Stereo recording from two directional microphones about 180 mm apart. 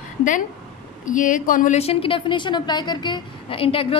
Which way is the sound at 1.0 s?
45° left (ahead or behind).